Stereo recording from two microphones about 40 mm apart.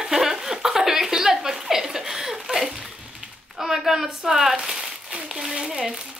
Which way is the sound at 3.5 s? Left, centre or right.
Centre.